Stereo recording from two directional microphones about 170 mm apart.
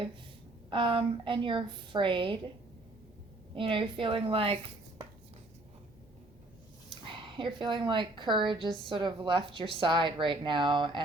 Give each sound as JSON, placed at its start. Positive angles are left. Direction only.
{"t": 0.7, "sound": "a woman's voice", "side_deg": -30}
{"t": 3.5, "sound": "a woman's voice", "side_deg": -30}
{"t": 7.0, "sound": "a woman's voice", "side_deg": -30}